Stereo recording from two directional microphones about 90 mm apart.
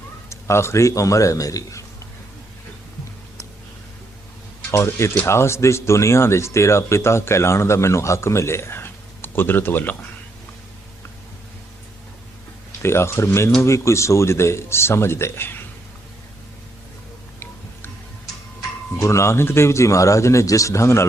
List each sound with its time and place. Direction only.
0.3 s speech: 30° left (ahead or behind)
4.7 s speech: 30° left (ahead or behind)
12.8 s speech: 30° left (ahead or behind)
18.9 s speech: 35° left (ahead or behind)